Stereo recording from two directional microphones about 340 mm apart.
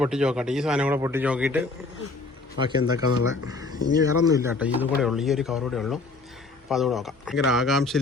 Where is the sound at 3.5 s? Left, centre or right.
Centre.